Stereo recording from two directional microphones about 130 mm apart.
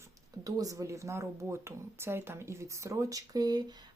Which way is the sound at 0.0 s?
30° right (ahead or behind).